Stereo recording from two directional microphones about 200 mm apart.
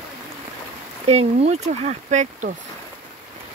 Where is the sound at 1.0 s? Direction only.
30° right (ahead or behind).